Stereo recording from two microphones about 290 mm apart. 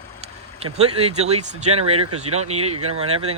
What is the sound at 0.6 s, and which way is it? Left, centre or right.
Speech, right.